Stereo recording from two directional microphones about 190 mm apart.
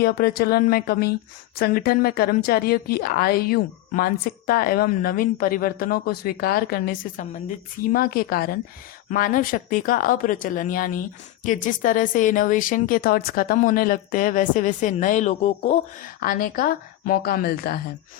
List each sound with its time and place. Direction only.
0.0 s a woman's voice: 50° left (ahead or behind); by 15.8 s 35° left (ahead or behind)
16.2 s a woman's voice: 50° left (ahead or behind)